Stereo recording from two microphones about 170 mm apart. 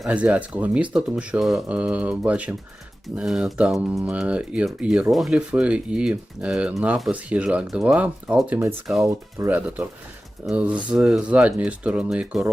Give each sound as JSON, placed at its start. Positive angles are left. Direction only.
{"t": 0.0, "sound": "speech", "side_deg": -5}